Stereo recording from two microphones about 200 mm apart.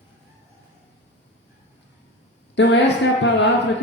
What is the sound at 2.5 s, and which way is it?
Speech, 60° left (ahead or behind).